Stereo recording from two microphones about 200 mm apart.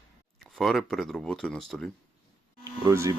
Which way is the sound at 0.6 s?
Centre (ahead or behind).